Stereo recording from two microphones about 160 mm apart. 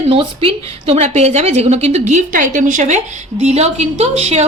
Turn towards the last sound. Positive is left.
turn(degrees=-40)  # may be behind; listen again after turning